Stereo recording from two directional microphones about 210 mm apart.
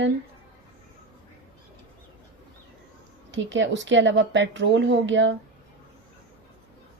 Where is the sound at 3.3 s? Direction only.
60° right (ahead or behind).